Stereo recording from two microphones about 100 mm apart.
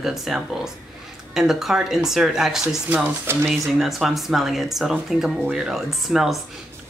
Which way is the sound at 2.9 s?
20° right (ahead or behind).